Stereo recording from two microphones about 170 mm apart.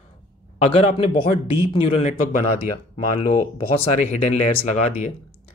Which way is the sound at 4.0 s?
45° left (ahead or behind).